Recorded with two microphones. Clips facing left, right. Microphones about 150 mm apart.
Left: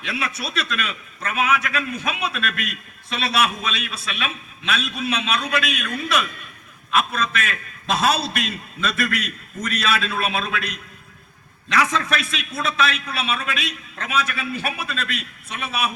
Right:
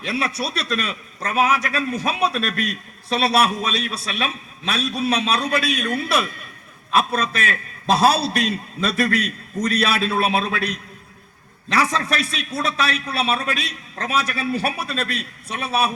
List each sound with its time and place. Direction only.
0.0 s a man's voice: 35° right (ahead or behind)